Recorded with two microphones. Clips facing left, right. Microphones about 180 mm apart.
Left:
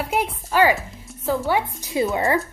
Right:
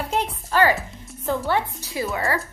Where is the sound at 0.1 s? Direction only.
10° left (ahead or behind).